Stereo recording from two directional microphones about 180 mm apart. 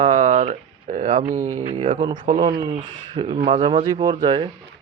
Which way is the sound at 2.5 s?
25° right (ahead or behind).